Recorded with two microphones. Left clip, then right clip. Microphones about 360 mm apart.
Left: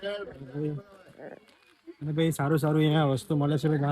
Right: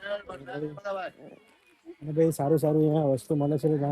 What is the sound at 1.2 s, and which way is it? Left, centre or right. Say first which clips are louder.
Speech: left 5 dB; right.